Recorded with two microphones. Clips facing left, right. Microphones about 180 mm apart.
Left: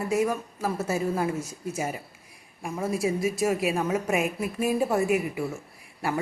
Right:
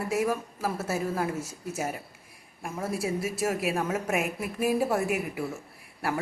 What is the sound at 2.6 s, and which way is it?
Speech, centre (ahead or behind).